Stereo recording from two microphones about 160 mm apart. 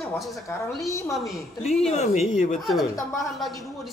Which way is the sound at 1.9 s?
45° left (ahead or behind).